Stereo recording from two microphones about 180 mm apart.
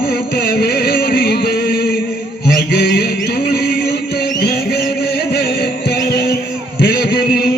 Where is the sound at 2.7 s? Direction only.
60° left (ahead or behind).